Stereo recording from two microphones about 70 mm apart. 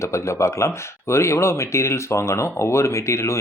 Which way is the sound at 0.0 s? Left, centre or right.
Left.